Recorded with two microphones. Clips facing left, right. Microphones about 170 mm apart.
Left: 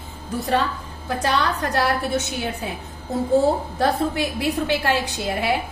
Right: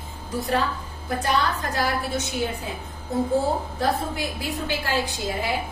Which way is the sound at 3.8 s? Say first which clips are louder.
Left 6 dB; 70° left (ahead or behind).